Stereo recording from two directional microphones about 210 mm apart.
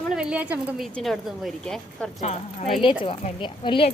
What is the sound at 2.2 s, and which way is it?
Speech, 30° left (ahead or behind).